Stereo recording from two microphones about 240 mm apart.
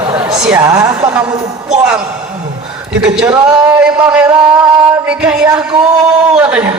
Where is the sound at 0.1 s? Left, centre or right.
Centre.